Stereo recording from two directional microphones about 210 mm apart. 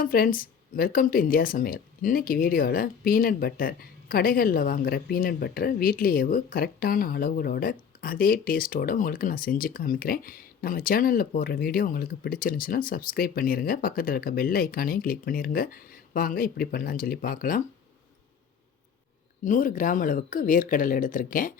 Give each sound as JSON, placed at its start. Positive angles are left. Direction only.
{"t": 0.0, "sound": "speech", "side_deg": 45}
{"t": 19.5, "sound": "speech", "side_deg": 40}